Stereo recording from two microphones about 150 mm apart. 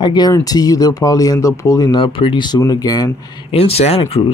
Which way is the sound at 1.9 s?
35° left (ahead or behind).